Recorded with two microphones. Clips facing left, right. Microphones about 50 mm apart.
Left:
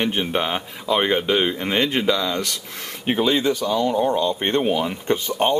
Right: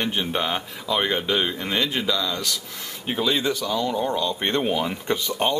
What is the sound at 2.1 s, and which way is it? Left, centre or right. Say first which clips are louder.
Speech: left 4 dB; left.